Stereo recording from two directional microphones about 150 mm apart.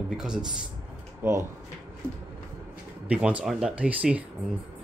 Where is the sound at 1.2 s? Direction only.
20° right (ahead or behind).